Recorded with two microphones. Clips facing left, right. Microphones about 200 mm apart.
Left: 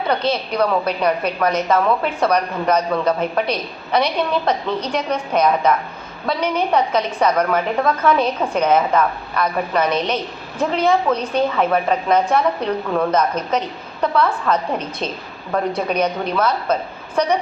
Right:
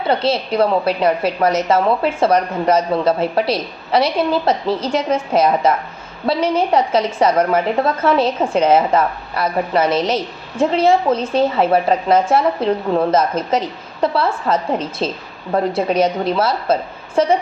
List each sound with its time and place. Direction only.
0.3 s a woman's voice: 25° right (ahead or behind)